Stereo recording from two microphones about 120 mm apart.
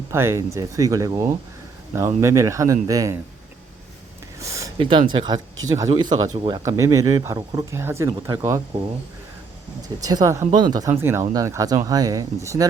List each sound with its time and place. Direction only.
0.1 s speech: 20° right (ahead or behind)
4.4 s a sound: 25° right (ahead or behind)
4.8 s speech: 45° right (ahead or behind)
6.3 s speech: 50° right (ahead or behind)
6.7 s speech: 25° right (ahead or behind)
10.0 s speech: 30° right (ahead or behind)
10.9 s speech: 20° right (ahead or behind)